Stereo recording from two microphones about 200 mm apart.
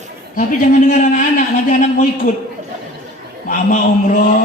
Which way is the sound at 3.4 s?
40° left (ahead or behind).